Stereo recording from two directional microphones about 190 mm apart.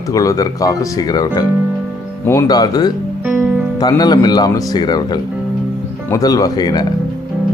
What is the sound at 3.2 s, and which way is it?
Music, 10° right (ahead or behind).